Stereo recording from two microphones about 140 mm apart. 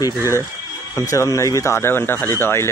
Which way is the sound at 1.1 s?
20° left (ahead or behind).